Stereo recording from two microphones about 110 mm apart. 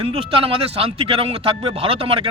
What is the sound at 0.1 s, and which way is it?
Speech, 60° right (ahead or behind).